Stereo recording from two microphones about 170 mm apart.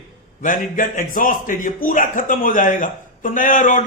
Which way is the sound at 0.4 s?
50° left (ahead or behind).